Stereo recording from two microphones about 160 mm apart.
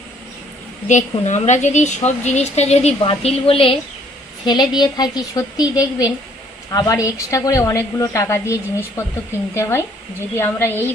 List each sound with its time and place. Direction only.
0.8 s a woman's voice: 50° left (ahead or behind); by 10.9 s 15° left (ahead or behind)